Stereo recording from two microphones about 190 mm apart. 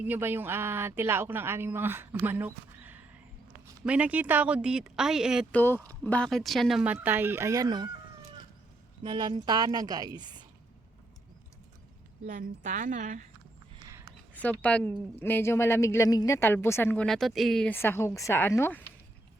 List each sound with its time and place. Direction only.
0.0 s a man's voice: 10° right (ahead or behind)
5.5 s a man's voice: 10° left (ahead or behind); by 7.9 s 20° right (ahead or behind)
9.0 s a woman's voice: 25° right (ahead or behind)
12.2 s a woman's voice: 45° right (ahead or behind)
14.6 s speech: 5° left (ahead or behind)